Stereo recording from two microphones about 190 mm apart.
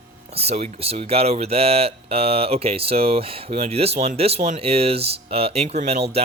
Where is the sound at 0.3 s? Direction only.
30° right (ahead or behind).